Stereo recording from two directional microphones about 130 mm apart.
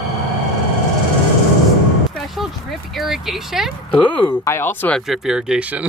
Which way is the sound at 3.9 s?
10° left (ahead or behind).